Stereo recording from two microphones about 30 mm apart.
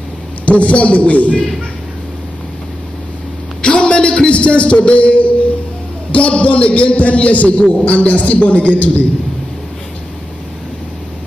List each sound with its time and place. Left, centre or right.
0.5 s a man's voice: left
3.6 s a sound: left
4.4 s a man's voice: left